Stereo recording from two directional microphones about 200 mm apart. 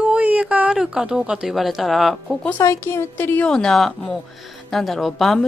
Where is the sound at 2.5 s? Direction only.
15° left (ahead or behind).